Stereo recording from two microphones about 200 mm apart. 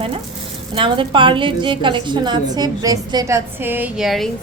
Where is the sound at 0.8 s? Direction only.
25° right (ahead or behind).